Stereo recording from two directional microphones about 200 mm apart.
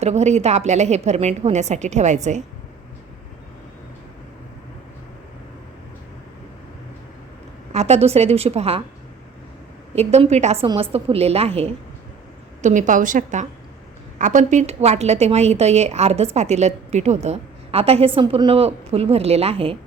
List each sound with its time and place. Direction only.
0.0 s a woman's voice: 35° right (ahead or behind)
7.7 s a woman's voice: 35° right (ahead or behind)
9.9 s a woman's voice: 30° right (ahead or behind)